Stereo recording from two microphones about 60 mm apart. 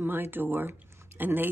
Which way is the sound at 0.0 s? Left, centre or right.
Right.